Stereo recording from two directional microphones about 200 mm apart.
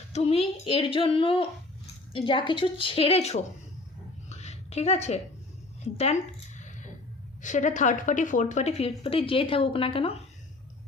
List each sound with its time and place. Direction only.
0.1 s speech: 30° left (ahead or behind)
4.3 s a sound: 35° left (ahead or behind)
7.4 s a woman's voice: 40° left (ahead or behind)